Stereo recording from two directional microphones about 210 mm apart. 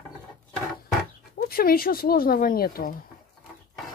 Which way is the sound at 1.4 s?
45° left (ahead or behind).